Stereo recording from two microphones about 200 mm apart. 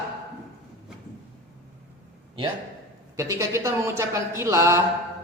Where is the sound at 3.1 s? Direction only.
15° right (ahead or behind).